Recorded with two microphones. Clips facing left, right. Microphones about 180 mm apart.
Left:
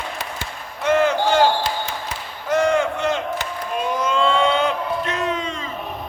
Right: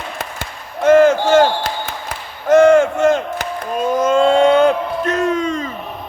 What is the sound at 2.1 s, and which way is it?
Crowd, 45° right (ahead or behind).